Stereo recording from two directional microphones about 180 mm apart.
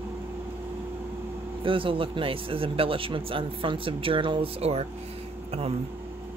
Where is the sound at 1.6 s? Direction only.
30° right (ahead or behind).